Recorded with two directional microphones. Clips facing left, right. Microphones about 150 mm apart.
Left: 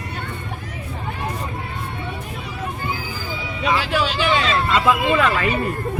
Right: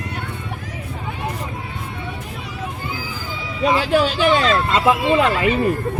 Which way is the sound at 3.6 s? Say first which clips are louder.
Right 4 dB; 40° right (ahead or behind).